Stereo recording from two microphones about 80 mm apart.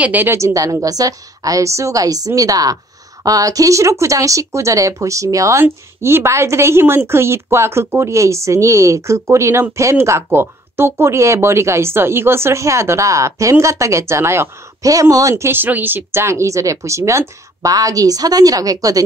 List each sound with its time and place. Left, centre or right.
0.0 s a woman's voice: right
0.4 s speech: right
14.9 s speech: right